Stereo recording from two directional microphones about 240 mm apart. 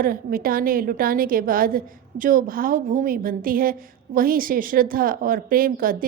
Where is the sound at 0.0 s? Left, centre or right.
Right.